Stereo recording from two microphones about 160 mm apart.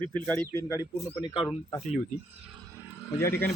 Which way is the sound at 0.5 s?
15° left (ahead or behind).